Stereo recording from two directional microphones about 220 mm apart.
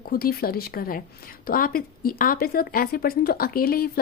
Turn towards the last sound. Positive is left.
turn(degrees=45)  # may be behind; listen again after turning